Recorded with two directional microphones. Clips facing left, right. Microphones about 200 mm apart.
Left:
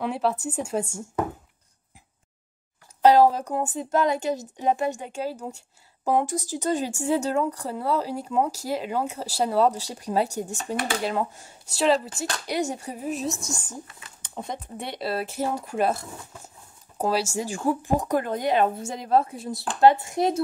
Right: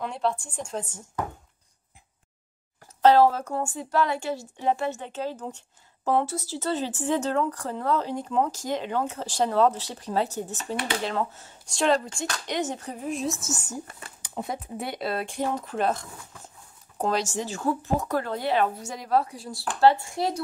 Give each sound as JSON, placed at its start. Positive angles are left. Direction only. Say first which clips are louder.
{"t": 0.0, "sound": "speech", "louder": "left 3 dB", "side_deg": 5}
{"t": 3.0, "sound": "speech", "louder": "left 1 dB", "side_deg": 15}
{"t": 13.8, "sound": "speech", "louder": "right 4 dB", "side_deg": -45}
{"t": 14.2, "sound": "speech", "louder": "right 1 dB", "side_deg": -5}